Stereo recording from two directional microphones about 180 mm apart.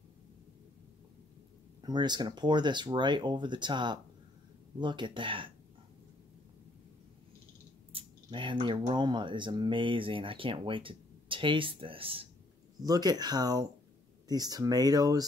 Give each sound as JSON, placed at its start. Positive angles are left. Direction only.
{"t": 1.8, "sound": "speech", "side_deg": -25}
{"t": 7.9, "sound": "a sound", "side_deg": -25}
{"t": 8.9, "sound": "speech", "side_deg": -25}